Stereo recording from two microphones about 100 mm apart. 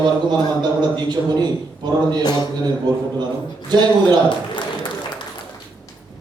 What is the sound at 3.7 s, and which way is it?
Speech, 45° right (ahead or behind).